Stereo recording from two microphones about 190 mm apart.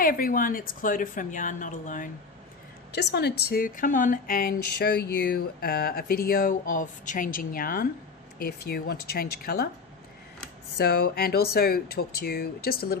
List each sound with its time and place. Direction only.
0.0 s speech: 50° left (ahead or behind)
2.9 s speech: 60° left (ahead or behind)
10.8 s speech: 55° left (ahead or behind)